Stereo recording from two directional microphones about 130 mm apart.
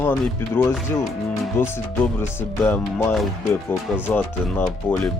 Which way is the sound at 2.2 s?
15° left (ahead or behind).